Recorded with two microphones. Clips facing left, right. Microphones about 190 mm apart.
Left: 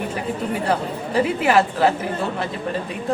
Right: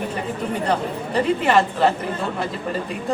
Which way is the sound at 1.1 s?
5° left (ahead or behind).